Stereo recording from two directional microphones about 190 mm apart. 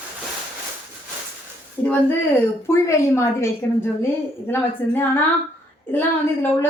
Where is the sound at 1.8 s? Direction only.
10° left (ahead or behind).